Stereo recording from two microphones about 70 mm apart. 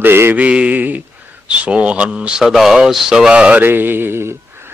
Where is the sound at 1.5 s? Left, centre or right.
Centre.